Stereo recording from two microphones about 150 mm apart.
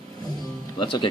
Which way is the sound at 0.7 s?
30° left (ahead or behind).